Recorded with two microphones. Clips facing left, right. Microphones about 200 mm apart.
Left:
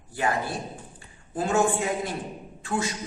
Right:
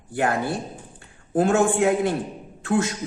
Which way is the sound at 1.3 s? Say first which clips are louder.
Right 5 dB; 60° right (ahead or behind).